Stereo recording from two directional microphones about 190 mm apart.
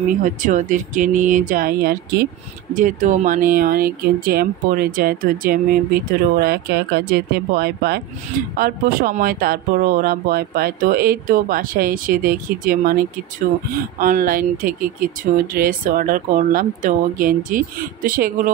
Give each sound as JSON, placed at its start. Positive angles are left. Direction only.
{"t": 0.2, "sound": "speech", "side_deg": -40}
{"t": 2.7, "sound": "speech", "side_deg": -45}
{"t": 13.9, "sound": "speech", "side_deg": -45}